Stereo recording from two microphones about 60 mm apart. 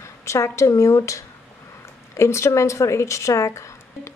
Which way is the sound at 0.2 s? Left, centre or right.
Left.